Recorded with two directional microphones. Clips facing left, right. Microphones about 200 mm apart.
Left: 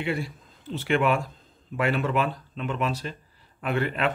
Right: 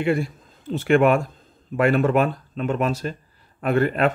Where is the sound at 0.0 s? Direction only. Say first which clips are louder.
Right 7 dB; 50° right (ahead or behind).